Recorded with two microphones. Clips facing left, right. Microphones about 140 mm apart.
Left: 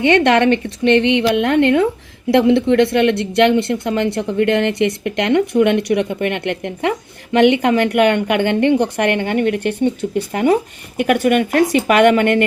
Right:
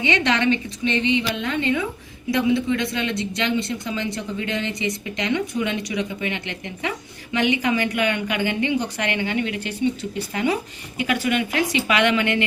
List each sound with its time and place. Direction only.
0.0 s a woman's voice: 55° left (ahead or behind)